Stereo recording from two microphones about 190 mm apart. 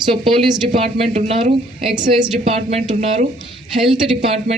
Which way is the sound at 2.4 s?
35° right (ahead or behind).